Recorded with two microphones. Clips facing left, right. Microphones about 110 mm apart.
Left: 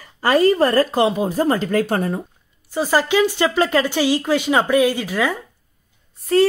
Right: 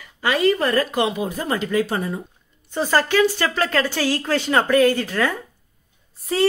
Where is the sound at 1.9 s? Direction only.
50° left (ahead or behind).